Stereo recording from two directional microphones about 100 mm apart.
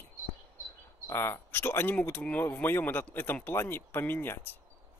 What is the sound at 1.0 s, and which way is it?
Speech, 25° left (ahead or behind).